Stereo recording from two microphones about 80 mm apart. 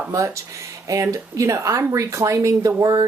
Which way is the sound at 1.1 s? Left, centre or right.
Right.